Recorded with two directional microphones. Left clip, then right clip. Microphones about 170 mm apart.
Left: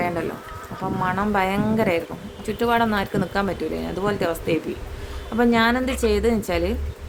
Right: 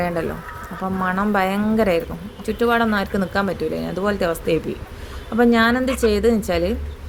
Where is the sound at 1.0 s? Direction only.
15° right (ahead or behind).